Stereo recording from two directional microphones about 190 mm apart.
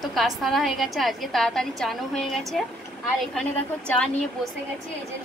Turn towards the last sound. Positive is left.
turn(degrees=5)  # may be behind; listen again after turning